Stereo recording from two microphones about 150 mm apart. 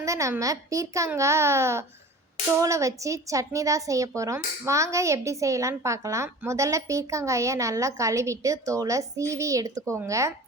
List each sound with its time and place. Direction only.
0.0 s speech: 20° right (ahead or behind)